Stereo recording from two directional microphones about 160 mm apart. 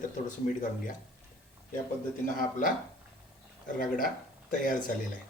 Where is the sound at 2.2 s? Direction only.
60° left (ahead or behind).